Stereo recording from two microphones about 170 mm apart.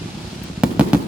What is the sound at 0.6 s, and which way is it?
Fireworks, 5° right (ahead or behind).